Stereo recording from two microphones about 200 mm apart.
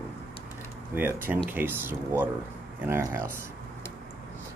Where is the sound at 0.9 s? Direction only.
10° right (ahead or behind).